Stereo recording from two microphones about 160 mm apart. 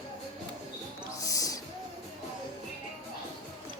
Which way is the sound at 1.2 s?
20° left (ahead or behind).